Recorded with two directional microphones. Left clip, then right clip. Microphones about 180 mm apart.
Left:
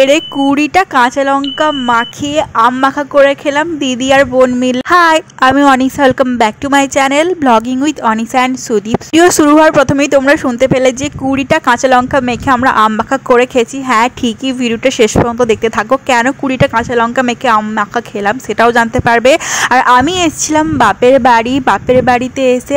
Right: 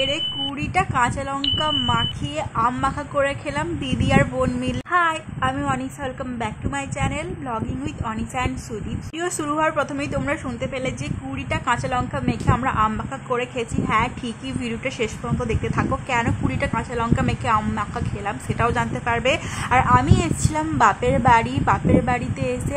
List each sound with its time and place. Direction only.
0.0 s speech: 50° left (ahead or behind)
4.9 s speech: 65° left (ahead or behind); by 22.8 s 40° left (ahead or behind)